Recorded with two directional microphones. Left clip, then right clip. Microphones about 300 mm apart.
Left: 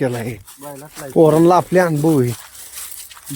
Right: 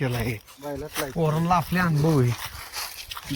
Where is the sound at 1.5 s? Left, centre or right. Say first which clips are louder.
Left 10 dB; centre.